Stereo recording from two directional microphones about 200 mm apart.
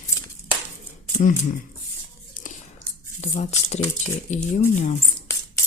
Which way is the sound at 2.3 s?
40° left (ahead or behind).